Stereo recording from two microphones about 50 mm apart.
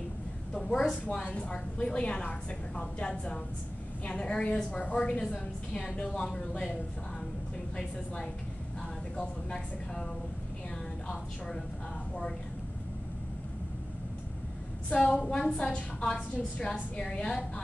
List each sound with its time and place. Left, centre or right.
0.5 s a sound: centre
1.1 s a woman's voice: left
9.1 s a woman's voice: centre
11.1 s speech: centre
14.9 s a woman's voice: centre